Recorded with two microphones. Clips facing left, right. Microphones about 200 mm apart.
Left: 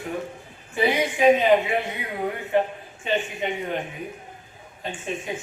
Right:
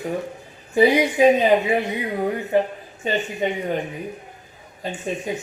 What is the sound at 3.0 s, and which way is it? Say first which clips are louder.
Speech: right 1 dB; 40° right (ahead or behind).